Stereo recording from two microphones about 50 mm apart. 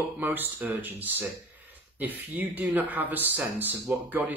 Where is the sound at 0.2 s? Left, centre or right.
Right.